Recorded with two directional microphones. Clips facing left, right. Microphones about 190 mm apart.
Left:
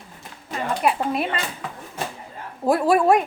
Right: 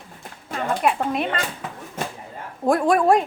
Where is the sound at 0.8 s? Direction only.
Centre (ahead or behind).